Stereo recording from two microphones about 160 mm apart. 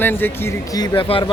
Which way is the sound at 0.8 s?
35° left (ahead or behind).